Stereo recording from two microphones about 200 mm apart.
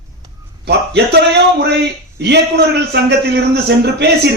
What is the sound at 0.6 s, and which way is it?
A man's voice, 55° right (ahead or behind).